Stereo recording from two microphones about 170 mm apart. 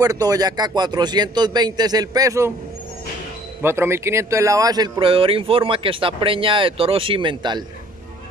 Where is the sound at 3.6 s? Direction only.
15° right (ahead or behind).